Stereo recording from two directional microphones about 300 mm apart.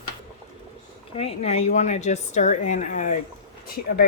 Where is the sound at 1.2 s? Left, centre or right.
Left.